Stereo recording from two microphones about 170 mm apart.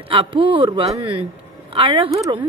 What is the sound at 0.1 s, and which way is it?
A woman's voice, 30° right (ahead or behind).